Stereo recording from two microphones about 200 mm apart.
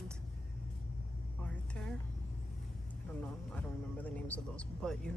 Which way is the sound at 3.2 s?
10° left (ahead or behind).